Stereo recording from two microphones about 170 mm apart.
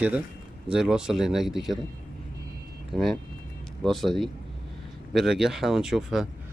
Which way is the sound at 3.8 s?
Centre (ahead or behind).